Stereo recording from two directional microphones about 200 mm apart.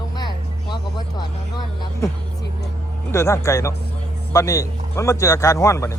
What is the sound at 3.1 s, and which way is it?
Speech, 15° left (ahead or behind).